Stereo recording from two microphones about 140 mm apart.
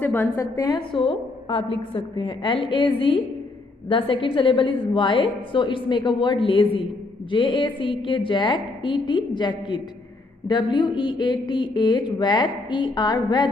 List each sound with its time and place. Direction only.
0.1 s a woman's voice: 15° left (ahead or behind)
0.9 s speech: 40° left (ahead or behind)
3.9 s speech: 40° left (ahead or behind)